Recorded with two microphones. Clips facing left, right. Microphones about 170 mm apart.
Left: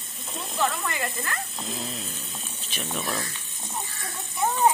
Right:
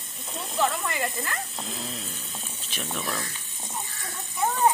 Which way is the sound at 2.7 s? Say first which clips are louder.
Left 1 dB; 5° left (ahead or behind).